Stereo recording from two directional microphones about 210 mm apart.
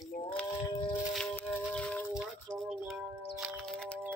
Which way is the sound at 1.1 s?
5° left (ahead or behind).